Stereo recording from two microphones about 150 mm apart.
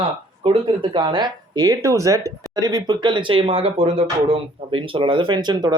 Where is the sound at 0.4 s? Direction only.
35° right (ahead or behind).